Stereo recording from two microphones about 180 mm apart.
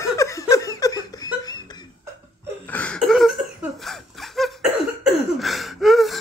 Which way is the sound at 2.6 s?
10° left (ahead or behind).